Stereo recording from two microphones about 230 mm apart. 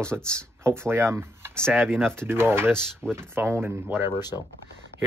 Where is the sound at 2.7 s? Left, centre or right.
Centre.